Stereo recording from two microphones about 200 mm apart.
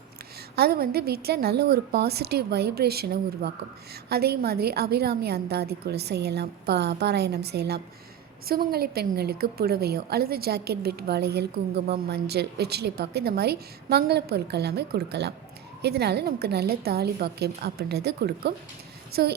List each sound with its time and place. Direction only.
0.5 s a woman's voice: 50° right (ahead or behind)